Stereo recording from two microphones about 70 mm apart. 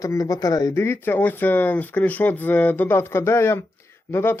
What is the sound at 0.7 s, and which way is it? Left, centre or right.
A man's voice, left.